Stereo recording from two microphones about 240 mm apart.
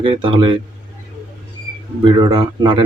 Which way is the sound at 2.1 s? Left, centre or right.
Centre.